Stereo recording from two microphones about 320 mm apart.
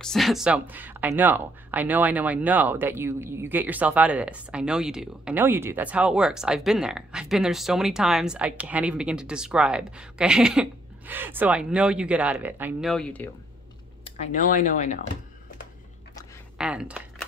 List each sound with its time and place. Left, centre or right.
0.0 s speech: centre
14.0 s speech: left
16.5 s a sound: centre